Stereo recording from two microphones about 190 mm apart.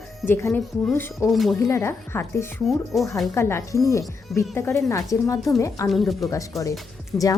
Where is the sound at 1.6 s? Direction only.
15° left (ahead or behind).